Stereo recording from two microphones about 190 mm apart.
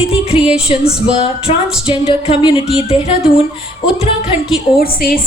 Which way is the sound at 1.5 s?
35° left (ahead or behind).